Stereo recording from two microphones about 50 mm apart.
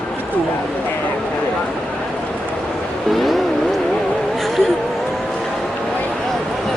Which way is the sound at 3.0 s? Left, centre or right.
Centre.